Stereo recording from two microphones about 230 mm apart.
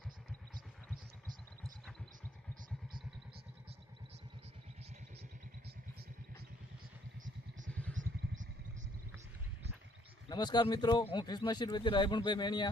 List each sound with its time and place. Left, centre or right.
7.7 s vehicle: centre
10.2 s speech: centre